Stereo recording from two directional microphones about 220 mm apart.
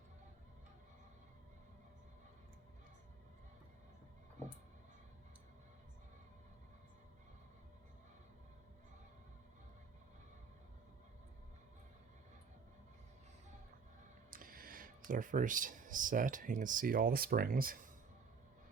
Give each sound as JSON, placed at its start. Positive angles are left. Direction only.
{"t": 14.3, "sound": "speech", "side_deg": -40}